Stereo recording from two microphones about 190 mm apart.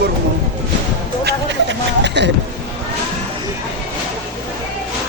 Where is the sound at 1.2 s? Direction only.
65° right (ahead or behind).